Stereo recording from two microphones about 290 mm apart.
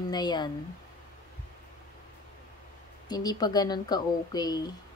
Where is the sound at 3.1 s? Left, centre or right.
Centre.